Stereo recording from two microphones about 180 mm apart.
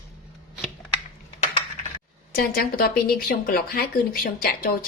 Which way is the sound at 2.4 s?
55° left (ahead or behind).